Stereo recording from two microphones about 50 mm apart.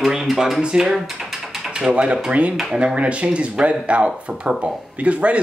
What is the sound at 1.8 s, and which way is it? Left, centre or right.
A man's voice, right.